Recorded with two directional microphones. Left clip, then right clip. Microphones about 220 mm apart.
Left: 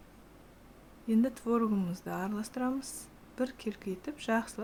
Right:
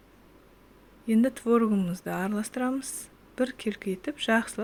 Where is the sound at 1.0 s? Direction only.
15° right (ahead or behind).